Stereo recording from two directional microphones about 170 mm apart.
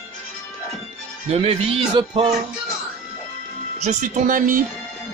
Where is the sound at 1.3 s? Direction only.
35° right (ahead or behind).